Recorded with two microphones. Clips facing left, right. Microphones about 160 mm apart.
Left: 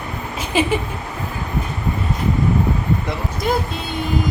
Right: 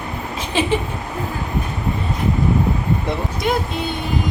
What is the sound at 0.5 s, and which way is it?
Speech, 10° left (ahead or behind).